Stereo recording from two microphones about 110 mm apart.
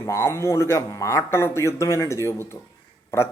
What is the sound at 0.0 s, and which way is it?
Speech, 25° left (ahead or behind).